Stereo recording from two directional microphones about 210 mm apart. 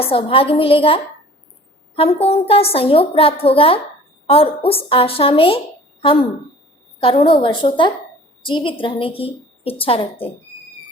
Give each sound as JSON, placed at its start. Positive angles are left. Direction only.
{"t": 0.0, "sound": "a woman's voice", "side_deg": 25}
{"t": 2.2, "sound": "a woman's voice", "side_deg": 30}
{"t": 7.0, "sound": "a woman's voice", "side_deg": 25}